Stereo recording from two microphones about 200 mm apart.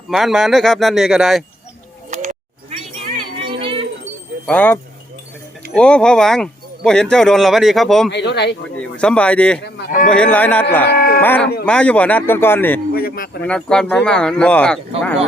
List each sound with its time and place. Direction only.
0.1 s speech: centre (ahead or behind)
2.0 s a sound: 35° right (ahead or behind)
3.6 s wind chime: 25° right (ahead or behind)
4.4 s speech: 10° left (ahead or behind)
8.1 s speech: 60° left (ahead or behind)
8.8 s speech: 5° left (ahead or behind)
10.8 s livestock: 50° left (ahead or behind)
11.2 s speech: 10° left (ahead or behind)
12.9 s a man's voice: 50° left (ahead or behind)
13.4 s speech: 5° left (ahead or behind)